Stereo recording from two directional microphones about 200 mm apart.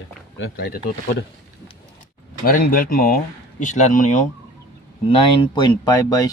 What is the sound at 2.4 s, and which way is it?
Speech, 45° left (ahead or behind).